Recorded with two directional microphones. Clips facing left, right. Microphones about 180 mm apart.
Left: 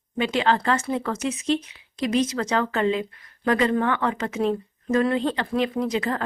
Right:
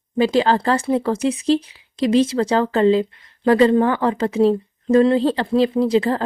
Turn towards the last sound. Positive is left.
turn(degrees=-30)  # may be behind; listen again after turning